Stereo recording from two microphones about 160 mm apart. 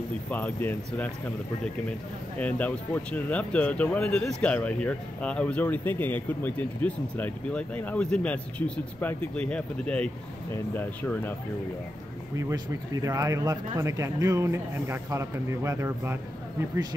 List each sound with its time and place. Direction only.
0.3 s speech: 10° left (ahead or behind)
2.3 s speech: 10° left (ahead or behind)
12.4 s speech: 20° right (ahead or behind)